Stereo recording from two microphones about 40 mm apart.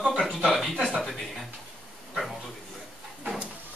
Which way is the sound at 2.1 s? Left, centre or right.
Centre.